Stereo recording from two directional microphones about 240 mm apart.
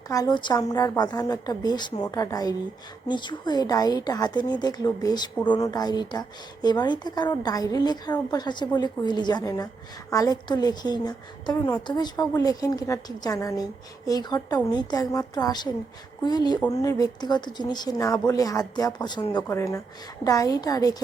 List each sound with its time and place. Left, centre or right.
0.1 s a woman's voice: centre